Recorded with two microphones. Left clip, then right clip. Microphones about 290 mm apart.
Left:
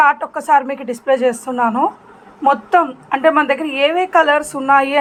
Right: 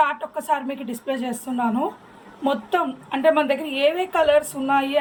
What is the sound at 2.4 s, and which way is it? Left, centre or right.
A woman's voice, centre.